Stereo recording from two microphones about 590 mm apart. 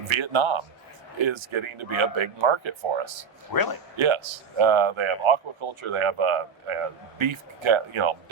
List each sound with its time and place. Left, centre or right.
0.1 s speech: right
3.5 s speech: left
3.9 s speech: right